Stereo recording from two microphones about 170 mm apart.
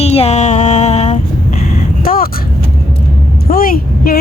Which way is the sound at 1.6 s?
60° left (ahead or behind).